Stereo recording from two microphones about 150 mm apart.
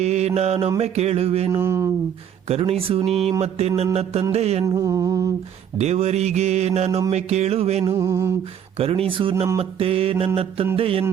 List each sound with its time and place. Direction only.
0.0 s speech: 45° right (ahead or behind)
1.5 s mantra: 20° right (ahead or behind)
2.5 s mantra: 40° right (ahead or behind)
3.4 s speech: 45° right (ahead or behind)
4.6 s mantra: 25° right (ahead or behind)
5.7 s speech: 45° right (ahead or behind)
7.9 s mantra: 20° right (ahead or behind)
8.8 s mantra: 40° right (ahead or behind)